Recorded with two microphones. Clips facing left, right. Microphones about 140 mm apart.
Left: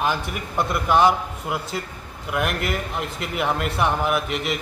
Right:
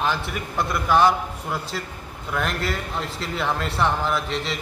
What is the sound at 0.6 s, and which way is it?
A man's voice, 20° left (ahead or behind).